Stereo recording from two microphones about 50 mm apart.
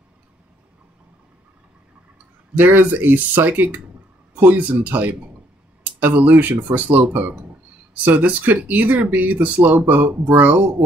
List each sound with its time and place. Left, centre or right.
2.5 s speech: right